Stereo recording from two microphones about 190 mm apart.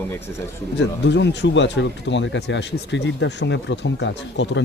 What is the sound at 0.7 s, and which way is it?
Speech, 65° left (ahead or behind).